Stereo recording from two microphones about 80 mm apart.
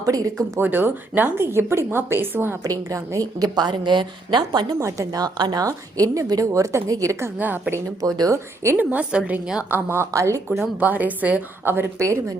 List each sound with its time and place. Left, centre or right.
0.0 s a woman's voice: right
0.6 s a woman's voice: right
2.6 s a woman's voice: right
4.8 s a woman's voice: right
5.6 s a woman's voice: right
7.3 s a woman's voice: right
8.0 s a woman's voice: right
8.6 s a woman's voice: right
9.6 s a woman's voice: right
10.1 s a woman's voice: right
10.8 s a woman's voice: right
11.9 s a woman's voice: right